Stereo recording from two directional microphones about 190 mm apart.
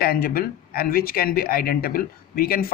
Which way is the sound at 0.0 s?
55° left (ahead or behind).